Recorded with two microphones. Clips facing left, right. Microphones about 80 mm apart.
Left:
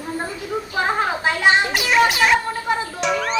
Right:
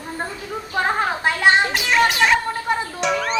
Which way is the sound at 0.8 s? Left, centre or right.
Centre.